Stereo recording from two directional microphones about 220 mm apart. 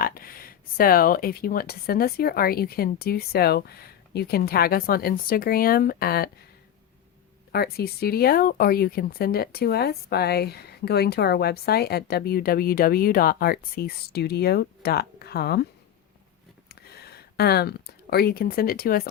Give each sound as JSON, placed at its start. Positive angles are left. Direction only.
{"t": 0.0, "sound": "speech", "side_deg": 40}
{"t": 7.5, "sound": "speech", "side_deg": 45}
{"t": 17.3, "sound": "speech", "side_deg": 45}